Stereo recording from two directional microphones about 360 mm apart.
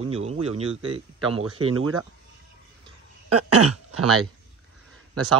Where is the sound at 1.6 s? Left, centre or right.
Right.